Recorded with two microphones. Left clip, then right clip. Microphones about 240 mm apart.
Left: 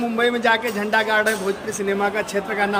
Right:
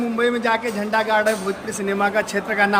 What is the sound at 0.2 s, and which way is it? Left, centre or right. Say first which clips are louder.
A man's voice: left 1 dB; centre.